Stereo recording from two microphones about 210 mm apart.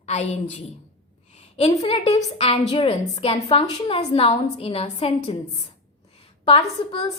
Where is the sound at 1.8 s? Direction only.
30° left (ahead or behind).